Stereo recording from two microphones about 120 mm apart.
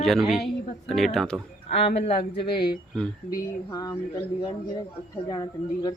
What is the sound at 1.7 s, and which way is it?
Speech, 60° left (ahead or behind).